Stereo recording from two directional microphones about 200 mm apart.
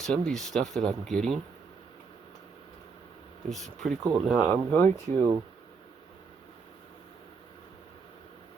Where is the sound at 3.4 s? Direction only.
Centre (ahead or behind).